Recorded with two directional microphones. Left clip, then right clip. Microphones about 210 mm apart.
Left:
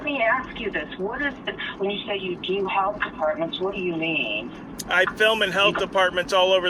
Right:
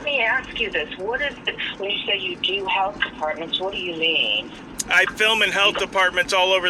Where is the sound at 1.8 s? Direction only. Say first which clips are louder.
Even; 20° right (ahead or behind).